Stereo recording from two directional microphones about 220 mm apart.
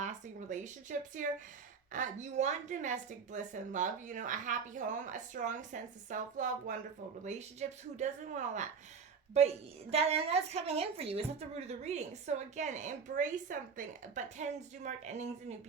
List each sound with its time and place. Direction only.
0.0 s a woman's voice: 35° right (ahead or behind)
9.9 s a woman's voice: 30° right (ahead or behind)